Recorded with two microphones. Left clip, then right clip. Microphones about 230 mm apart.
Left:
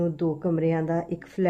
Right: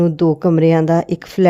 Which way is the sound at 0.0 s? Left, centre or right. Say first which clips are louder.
Right 12 dB; right.